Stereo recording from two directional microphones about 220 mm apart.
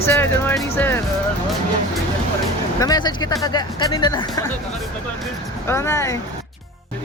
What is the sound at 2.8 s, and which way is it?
Speech, 20° left (ahead or behind).